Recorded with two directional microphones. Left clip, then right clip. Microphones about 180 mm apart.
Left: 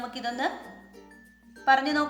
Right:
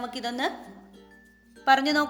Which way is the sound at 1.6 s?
55° right (ahead or behind).